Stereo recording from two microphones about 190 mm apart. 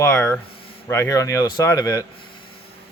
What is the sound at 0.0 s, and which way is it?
Speech, 10° left (ahead or behind).